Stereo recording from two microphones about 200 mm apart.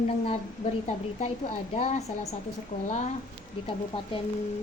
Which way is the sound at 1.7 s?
35° left (ahead or behind).